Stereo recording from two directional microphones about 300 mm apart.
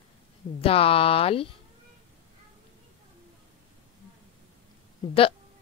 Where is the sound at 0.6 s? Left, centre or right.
Centre.